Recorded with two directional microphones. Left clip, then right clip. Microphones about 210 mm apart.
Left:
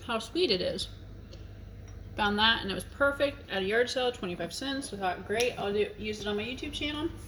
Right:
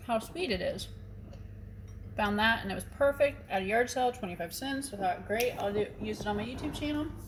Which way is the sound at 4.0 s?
35° left (ahead or behind).